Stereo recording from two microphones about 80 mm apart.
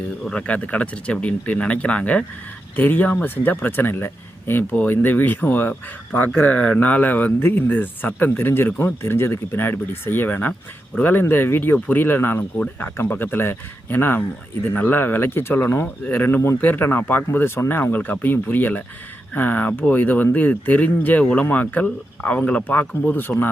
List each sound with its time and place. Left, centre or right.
0.3 s speech: centre